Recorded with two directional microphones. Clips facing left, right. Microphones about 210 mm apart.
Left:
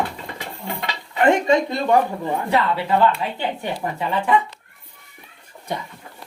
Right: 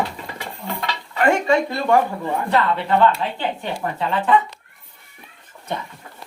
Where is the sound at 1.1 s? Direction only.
20° left (ahead or behind).